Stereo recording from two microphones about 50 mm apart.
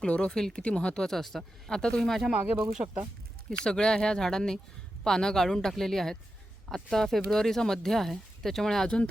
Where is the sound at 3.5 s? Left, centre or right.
Centre.